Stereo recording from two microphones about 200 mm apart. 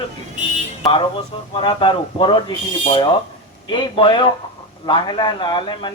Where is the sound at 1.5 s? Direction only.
25° left (ahead or behind).